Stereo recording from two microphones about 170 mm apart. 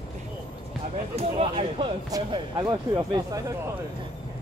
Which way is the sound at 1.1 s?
35° right (ahead or behind).